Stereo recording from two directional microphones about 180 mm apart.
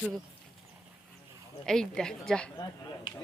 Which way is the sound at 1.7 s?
5° left (ahead or behind).